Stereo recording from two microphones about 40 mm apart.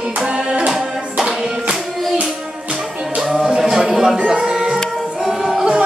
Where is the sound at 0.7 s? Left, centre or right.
Centre.